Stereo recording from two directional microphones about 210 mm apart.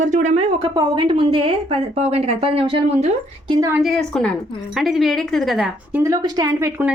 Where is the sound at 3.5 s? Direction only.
15° right (ahead or behind).